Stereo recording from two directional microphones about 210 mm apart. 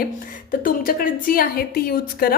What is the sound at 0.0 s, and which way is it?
A woman's voice, 40° left (ahead or behind).